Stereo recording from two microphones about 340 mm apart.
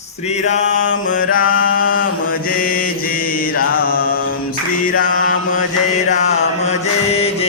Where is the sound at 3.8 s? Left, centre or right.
Left.